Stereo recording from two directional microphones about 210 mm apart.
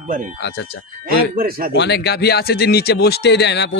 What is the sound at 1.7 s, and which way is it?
Speech, 55° left (ahead or behind).